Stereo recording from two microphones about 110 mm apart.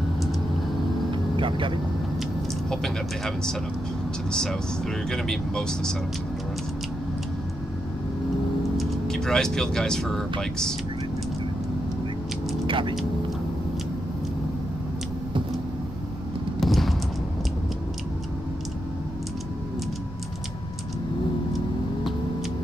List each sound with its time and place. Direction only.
1.3 s vehicle: 50° right (ahead or behind)
2.7 s speech: 5° left (ahead or behind)
8.7 s speech: 5° left (ahead or behind)
12.6 s vehicle: 50° right (ahead or behind)
16.5 s a sound: centre (ahead or behind)